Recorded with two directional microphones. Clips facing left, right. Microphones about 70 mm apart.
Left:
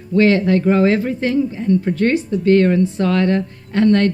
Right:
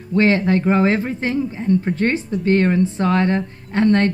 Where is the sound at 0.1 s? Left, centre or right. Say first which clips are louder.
Left 2 dB; right.